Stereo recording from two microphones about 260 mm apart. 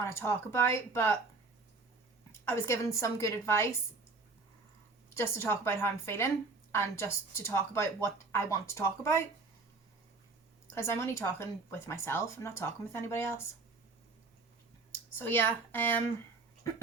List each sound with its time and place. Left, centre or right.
0.0 s a woman's voice: centre
2.4 s a woman's voice: centre
5.1 s a woman's voice: centre
10.8 s a woman's voice: centre
15.2 s a woman's voice: centre